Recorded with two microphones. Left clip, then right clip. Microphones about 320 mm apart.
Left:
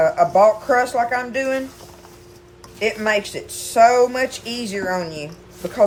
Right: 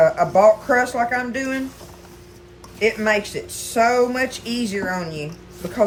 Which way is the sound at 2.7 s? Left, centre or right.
Centre.